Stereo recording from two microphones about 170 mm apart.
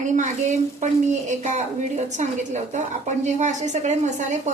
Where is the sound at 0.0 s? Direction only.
45° right (ahead or behind).